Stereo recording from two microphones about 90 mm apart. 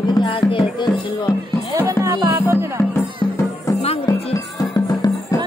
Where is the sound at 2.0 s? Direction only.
35° right (ahead or behind).